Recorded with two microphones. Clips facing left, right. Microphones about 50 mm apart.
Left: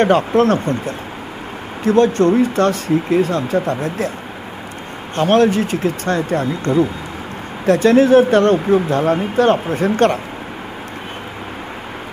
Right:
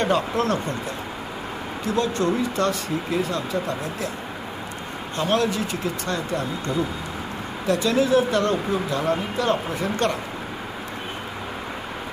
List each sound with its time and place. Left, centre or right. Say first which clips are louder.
0.0 s speech: left 9 dB; left
5.1 s speech: left 9 dB; left